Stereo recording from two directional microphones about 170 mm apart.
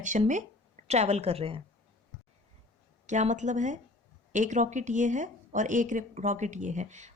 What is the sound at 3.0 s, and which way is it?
Speech, 45° right (ahead or behind).